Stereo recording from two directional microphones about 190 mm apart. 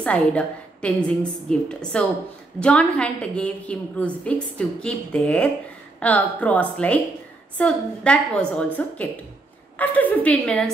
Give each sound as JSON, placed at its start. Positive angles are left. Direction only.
{"t": 0.0, "sound": "a woman's voice", "side_deg": 5}